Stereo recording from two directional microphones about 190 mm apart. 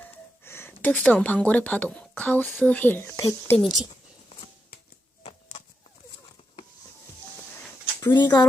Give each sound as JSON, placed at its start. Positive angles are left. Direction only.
{"t": 0.0, "sound": "speech", "side_deg": 10}
{"t": 5.2, "sound": "a sound", "side_deg": 30}
{"t": 8.0, "sound": "speech", "side_deg": 20}